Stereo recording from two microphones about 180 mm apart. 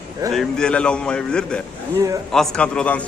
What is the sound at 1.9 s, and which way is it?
Speech, 20° right (ahead or behind).